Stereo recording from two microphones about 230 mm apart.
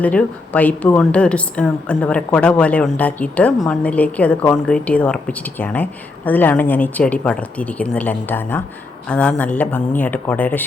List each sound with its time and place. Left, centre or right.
0.0 s a woman's voice: centre